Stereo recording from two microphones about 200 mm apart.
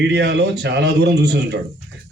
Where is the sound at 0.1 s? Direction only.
55° right (ahead or behind).